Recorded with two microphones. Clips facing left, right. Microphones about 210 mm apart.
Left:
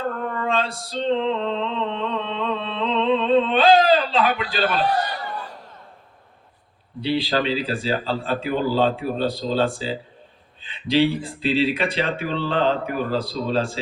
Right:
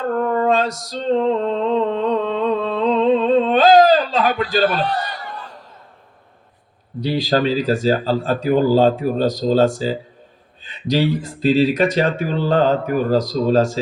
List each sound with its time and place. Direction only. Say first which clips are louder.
0.0 s female singing: right 8 dB; 40° right (ahead or behind)
7.0 s speech: right 4 dB; 40° right (ahead or behind)